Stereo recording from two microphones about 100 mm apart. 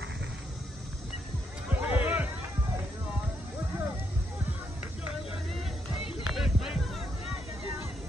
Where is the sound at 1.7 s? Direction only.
15° right (ahead or behind).